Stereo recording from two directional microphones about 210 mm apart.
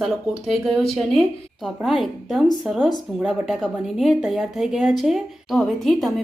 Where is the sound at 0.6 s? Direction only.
Centre (ahead or behind).